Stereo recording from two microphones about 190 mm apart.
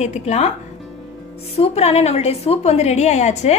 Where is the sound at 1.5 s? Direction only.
30° left (ahead or behind).